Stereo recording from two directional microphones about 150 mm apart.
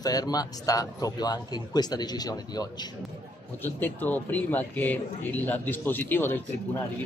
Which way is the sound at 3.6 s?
15° left (ahead or behind).